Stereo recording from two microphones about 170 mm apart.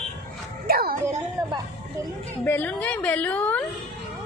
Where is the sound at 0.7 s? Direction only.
60° right (ahead or behind).